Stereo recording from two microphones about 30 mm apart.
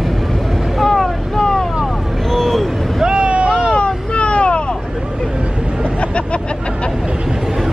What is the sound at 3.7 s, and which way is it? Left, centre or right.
Vehicle, left.